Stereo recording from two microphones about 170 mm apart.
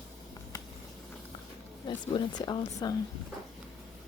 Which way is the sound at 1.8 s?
25° left (ahead or behind).